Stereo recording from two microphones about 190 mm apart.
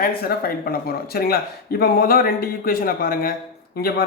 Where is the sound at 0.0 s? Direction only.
50° left (ahead or behind).